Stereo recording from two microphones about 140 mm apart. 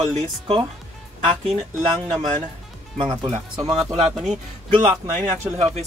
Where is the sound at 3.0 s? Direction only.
35° right (ahead or behind).